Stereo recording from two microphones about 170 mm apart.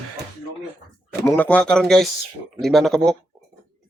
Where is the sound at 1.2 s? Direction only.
10° left (ahead or behind).